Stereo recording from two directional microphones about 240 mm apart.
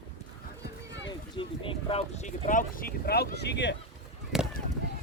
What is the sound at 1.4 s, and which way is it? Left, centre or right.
Speech, left.